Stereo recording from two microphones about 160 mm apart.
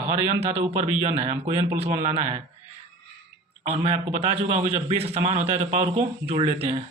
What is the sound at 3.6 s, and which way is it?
Speech, 40° right (ahead or behind).